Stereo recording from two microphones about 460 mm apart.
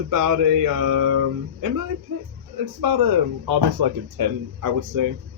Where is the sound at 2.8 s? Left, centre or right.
Right.